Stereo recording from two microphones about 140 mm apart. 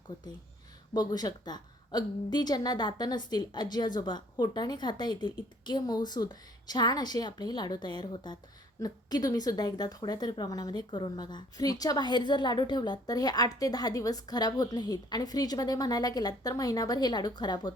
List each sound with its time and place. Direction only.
0.9 s a woman's voice: 30° left (ahead or behind)